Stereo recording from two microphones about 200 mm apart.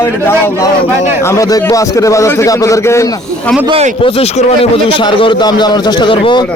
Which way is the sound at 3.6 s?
30° right (ahead or behind).